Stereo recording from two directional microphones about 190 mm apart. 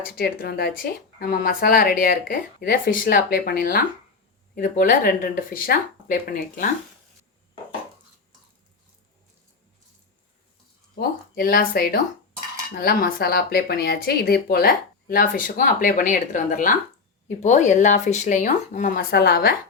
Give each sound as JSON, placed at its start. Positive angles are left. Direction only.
{"t": 0.1, "sound": "speech", "side_deg": 50}
{"t": 11.3, "sound": "speech", "side_deg": 50}